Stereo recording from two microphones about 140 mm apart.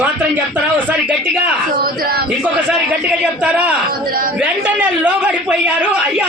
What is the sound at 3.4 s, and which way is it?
Speech, 10° right (ahead or behind).